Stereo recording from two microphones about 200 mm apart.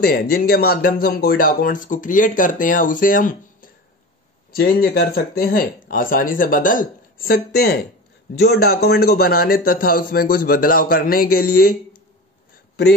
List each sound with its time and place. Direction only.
0.0 s speech: 50° left (ahead or behind)